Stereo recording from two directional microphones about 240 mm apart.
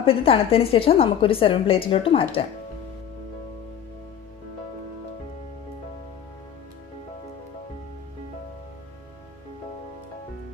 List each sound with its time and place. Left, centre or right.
0.0 s a woman's voice: left